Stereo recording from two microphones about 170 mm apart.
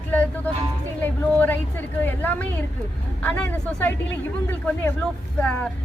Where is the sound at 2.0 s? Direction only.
10° left (ahead or behind).